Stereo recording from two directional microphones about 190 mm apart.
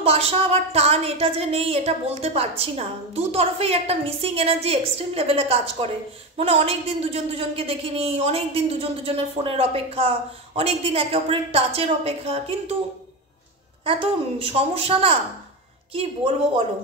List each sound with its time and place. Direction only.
0.0 s a woman's voice: 30° right (ahead or behind)
13.8 s a woman's voice: 30° right (ahead or behind)